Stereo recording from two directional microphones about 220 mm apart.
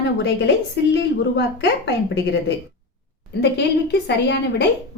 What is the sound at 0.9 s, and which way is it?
Speech, 50° left (ahead or behind).